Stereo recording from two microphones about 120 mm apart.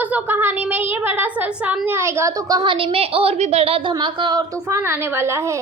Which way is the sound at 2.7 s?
50° right (ahead or behind).